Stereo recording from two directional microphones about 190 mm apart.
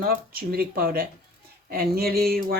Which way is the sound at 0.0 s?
55° right (ahead or behind).